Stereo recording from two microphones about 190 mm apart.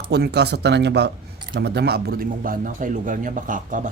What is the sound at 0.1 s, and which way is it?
Speech, 60° right (ahead or behind).